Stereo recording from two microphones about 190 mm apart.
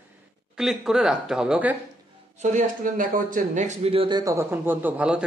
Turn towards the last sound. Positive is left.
turn(degrees=-5)  # may be behind; listen again after turning